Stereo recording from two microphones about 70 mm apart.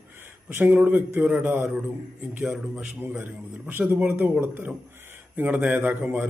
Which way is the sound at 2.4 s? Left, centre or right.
Centre.